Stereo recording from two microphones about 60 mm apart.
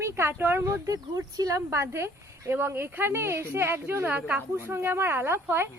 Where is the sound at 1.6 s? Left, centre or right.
Right.